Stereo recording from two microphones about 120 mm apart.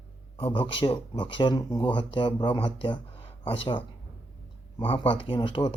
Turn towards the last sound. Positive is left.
turn(degrees=40)  # may be behind; listen again after turning